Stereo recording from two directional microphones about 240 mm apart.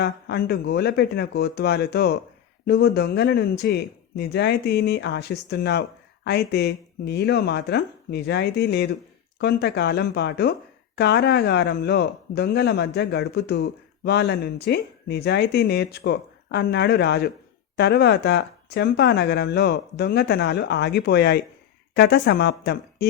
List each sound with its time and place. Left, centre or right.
0.0 s speech: left